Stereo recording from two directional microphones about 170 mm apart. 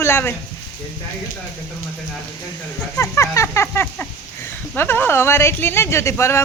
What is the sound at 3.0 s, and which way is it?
Speech, 15° left (ahead or behind).